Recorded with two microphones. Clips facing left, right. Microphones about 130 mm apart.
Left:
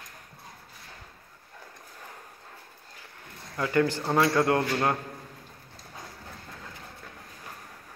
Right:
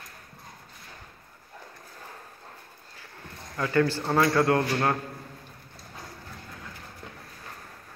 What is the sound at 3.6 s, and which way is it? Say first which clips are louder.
A man's voice: right 1 dB; 20° left (ahead or behind).